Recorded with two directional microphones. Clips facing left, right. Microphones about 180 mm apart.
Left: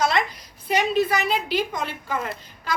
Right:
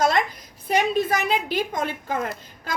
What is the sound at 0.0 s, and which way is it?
A woman's voice, 50° right (ahead or behind).